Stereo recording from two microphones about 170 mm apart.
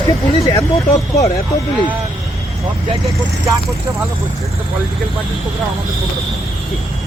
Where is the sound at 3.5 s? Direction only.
15° right (ahead or behind).